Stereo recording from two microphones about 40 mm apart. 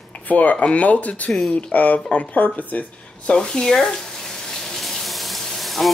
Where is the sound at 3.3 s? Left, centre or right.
Centre.